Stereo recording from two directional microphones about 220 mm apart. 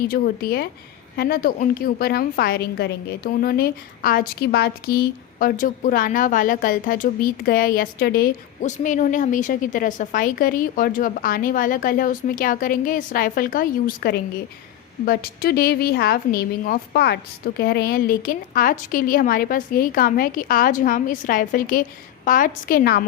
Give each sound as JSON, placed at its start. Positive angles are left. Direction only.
{"t": 0.1, "sound": "a woman's voice", "side_deg": 45}